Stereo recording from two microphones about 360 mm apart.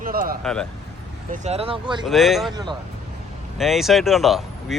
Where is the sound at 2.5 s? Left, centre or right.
Centre.